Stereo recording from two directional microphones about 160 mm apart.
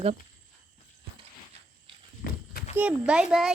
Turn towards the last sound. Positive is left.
turn(degrees=0)  # may be behind; listen again after turning